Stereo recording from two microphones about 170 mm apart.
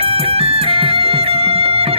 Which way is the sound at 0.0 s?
35° right (ahead or behind).